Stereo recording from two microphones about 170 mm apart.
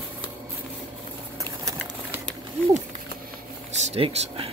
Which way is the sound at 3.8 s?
35° right (ahead or behind).